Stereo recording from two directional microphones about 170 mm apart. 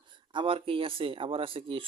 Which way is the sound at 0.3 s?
30° right (ahead or behind).